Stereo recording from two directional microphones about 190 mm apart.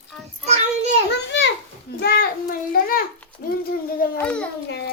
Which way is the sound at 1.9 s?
55° left (ahead or behind).